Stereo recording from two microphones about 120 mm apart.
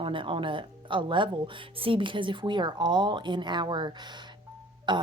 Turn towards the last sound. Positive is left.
turn(degrees=-40)  # may be behind; listen again after turning